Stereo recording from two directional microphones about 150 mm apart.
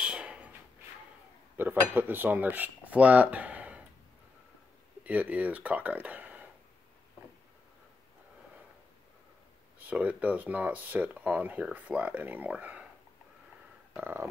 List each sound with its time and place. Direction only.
0.0 s a sound: 5° right (ahead or behind)
1.6 s cutlery: 15° right (ahead or behind)
5.0 s speech: 10° right (ahead or behind)
9.8 s speech: 10° right (ahead or behind)
13.9 s speech: 15° right (ahead or behind)